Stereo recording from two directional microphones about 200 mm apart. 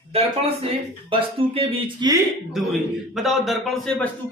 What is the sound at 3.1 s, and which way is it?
Speech, centre (ahead or behind).